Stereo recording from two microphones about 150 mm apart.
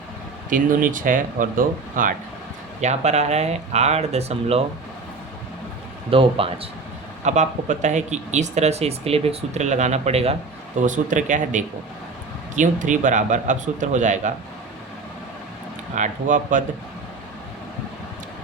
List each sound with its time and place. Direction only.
0.5 s speech: 65° right (ahead or behind)
2.8 s speech: 50° right (ahead or behind)
6.1 s speech: 40° right (ahead or behind)
7.3 s speech: 50° right (ahead or behind)
10.8 s speech: 55° right (ahead or behind)
16.0 s speech: 60° right (ahead or behind)